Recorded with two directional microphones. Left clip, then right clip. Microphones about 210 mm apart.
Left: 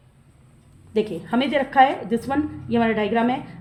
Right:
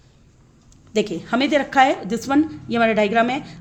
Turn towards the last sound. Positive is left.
turn(degrees=-45)  # may be behind; listen again after turning